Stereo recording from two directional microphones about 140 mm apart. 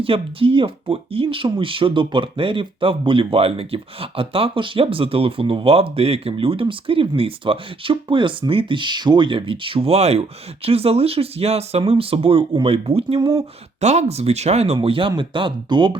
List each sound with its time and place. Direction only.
0.0 s speech: 40° right (ahead or behind)
14.8 s speech: 40° right (ahead or behind)